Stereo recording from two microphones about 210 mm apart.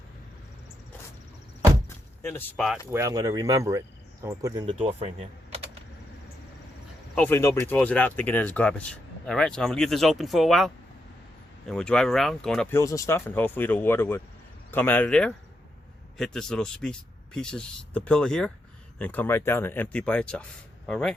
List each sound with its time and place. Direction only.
2.9 s speech: 15° right (ahead or behind)
4.6 s speech: 30° right (ahead or behind)
7.2 s speech: 10° left (ahead or behind)
12.8 s speech: 15° left (ahead or behind)